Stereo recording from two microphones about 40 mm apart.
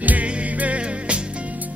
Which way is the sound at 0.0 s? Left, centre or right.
Right.